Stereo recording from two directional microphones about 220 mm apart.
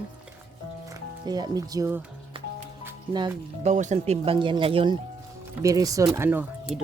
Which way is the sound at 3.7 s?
35° right (ahead or behind).